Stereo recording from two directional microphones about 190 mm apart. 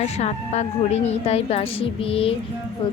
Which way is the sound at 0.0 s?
35° left (ahead or behind).